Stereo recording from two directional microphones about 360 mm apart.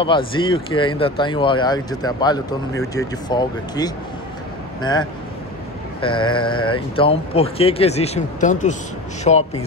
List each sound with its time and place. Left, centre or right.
0.0 s speech: centre
5.9 s speech: centre